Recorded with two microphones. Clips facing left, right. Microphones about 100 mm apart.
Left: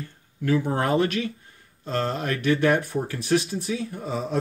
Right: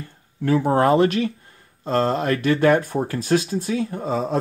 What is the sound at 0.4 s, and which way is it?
Speech, 50° right (ahead or behind).